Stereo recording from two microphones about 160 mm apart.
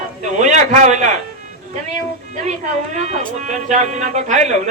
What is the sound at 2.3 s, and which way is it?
Speech, 50° right (ahead or behind).